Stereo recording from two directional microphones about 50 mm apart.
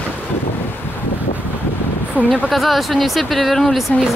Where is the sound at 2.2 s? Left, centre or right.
Right.